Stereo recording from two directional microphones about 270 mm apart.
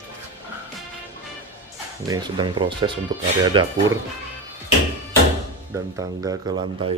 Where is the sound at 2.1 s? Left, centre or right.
Centre.